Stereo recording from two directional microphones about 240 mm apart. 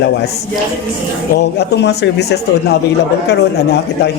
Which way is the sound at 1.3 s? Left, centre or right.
Left.